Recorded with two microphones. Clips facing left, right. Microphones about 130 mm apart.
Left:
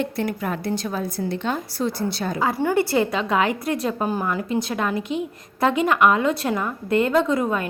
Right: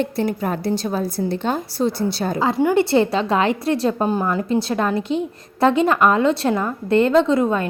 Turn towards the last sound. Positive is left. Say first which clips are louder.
# right 4 dB
turn(degrees=-25)  # may be behind; listen again after turning